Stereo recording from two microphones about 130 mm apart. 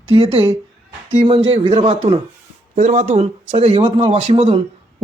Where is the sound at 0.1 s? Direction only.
45° right (ahead or behind).